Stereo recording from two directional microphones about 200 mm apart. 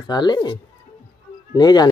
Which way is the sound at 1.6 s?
20° left (ahead or behind).